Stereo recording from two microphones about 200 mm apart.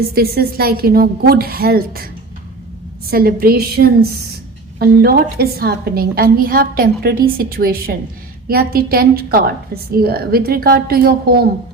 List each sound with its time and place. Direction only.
0.1 s a woman's voice: 50° right (ahead or behind)
3.1 s a woman's voice: 50° right (ahead or behind)